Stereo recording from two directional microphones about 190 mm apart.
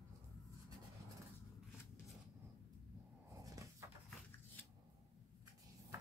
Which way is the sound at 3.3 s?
15° right (ahead or behind).